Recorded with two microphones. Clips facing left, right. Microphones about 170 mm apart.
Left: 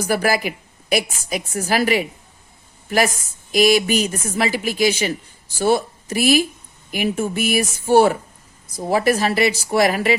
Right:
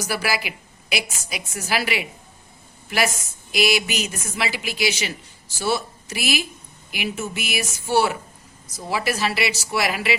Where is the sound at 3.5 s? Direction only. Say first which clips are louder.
Left 7 dB; 45° left (ahead or behind).